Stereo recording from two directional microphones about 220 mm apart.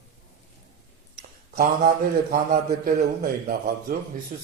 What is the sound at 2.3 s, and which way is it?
A man's voice, 35° right (ahead or behind).